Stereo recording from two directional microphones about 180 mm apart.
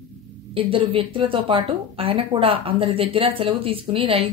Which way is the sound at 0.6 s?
30° right (ahead or behind).